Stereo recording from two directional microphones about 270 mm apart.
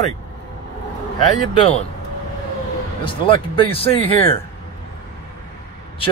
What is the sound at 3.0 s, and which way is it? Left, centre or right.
Speech, centre.